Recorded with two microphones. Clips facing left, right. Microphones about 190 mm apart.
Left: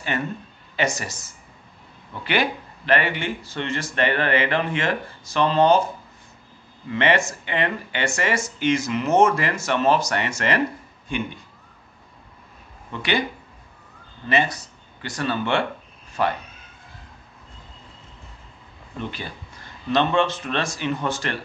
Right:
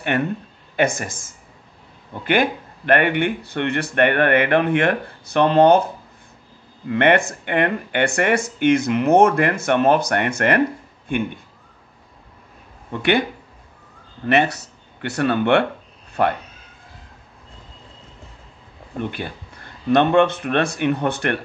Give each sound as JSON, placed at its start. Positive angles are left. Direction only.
{"t": 0.0, "sound": "a woman's voice", "side_deg": -60}
{"t": 6.9, "sound": "speech", "side_deg": -60}
{"t": 12.9, "sound": "speech", "side_deg": -55}
{"t": 14.2, "sound": "speech", "side_deg": -65}
{"t": 18.9, "sound": "speech", "side_deg": -55}